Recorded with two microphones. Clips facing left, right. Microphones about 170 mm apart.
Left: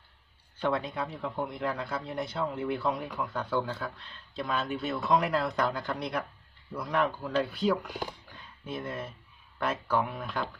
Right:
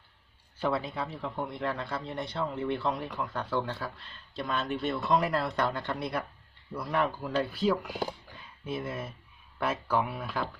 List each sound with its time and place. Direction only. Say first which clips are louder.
0.6 s a man's voice: left 1 dB; centre (ahead or behind)